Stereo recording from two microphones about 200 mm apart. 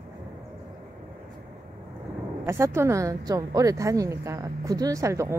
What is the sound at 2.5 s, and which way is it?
A woman's voice, 15° right (ahead or behind).